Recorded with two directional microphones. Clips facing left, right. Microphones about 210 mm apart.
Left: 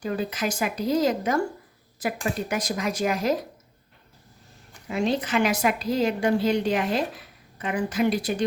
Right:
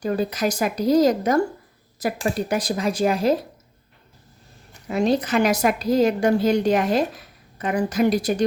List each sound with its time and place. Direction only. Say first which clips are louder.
0.0 s a woman's voice: right 5 dB; 40° right (ahead or behind)
4.9 s a woman's voice: right 4 dB; 40° right (ahead or behind)